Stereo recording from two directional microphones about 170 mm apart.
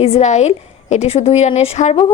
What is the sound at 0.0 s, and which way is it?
Speech, 40° left (ahead or behind).